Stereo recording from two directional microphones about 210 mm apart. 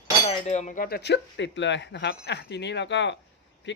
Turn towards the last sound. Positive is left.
turn(degrees=55)  # may be behind; listen again after turning